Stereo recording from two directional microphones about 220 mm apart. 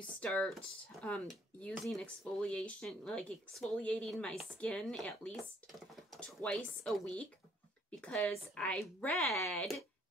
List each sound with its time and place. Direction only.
0.0 s speech: 5° left (ahead or behind)